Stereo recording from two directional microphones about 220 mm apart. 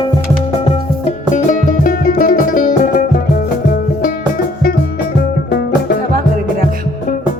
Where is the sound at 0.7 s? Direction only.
30° left (ahead or behind).